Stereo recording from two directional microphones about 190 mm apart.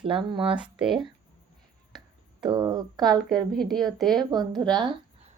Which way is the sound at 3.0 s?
Centre (ahead or behind).